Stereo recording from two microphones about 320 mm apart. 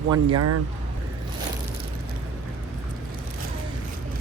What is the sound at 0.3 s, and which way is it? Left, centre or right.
Speech, right.